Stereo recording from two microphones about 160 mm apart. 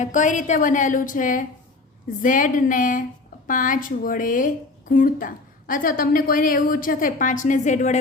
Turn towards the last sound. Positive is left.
turn(degrees=50)  # may be behind; listen again after turning